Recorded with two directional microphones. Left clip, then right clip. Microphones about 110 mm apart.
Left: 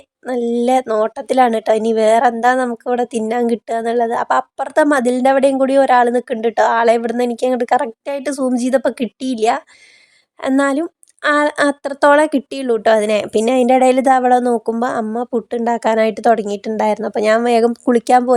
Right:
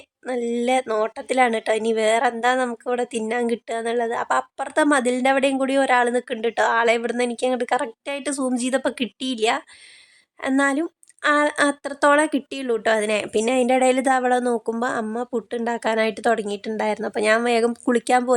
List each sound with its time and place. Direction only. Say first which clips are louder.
0.3 s a woman's voice: left 6 dB; 30° left (ahead or behind)